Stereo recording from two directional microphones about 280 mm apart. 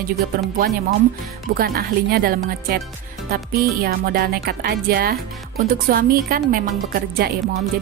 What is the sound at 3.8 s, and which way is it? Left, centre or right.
A woman's voice, right.